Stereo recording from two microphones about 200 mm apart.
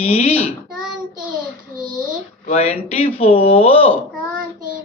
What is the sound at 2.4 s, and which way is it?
Speech, 30° left (ahead or behind).